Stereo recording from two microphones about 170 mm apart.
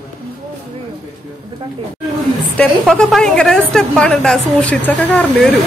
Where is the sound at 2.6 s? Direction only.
5° left (ahead or behind).